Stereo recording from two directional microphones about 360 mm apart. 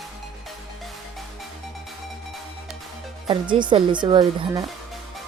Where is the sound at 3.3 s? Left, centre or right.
Centre.